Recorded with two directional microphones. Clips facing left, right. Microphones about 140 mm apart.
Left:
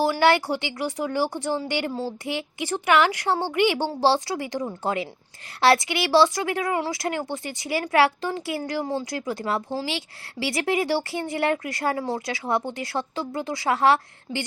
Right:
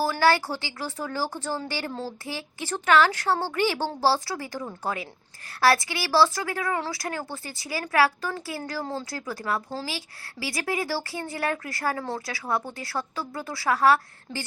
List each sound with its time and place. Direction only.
0.0 s a woman's voice: 20° left (ahead or behind)